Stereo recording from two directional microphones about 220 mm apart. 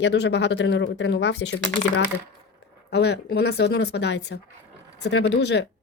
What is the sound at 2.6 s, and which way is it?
Speech, 50° left (ahead or behind).